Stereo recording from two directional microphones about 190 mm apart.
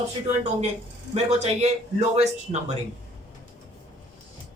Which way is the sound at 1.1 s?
35° right (ahead or behind).